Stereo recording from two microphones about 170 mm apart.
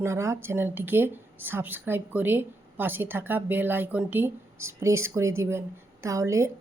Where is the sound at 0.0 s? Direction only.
15° right (ahead or behind).